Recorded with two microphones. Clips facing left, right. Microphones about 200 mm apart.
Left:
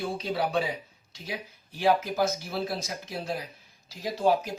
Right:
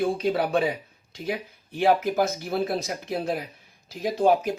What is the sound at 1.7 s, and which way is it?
Speech, 55° right (ahead or behind).